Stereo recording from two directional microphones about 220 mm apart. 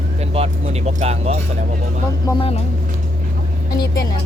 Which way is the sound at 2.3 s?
25° left (ahead or behind).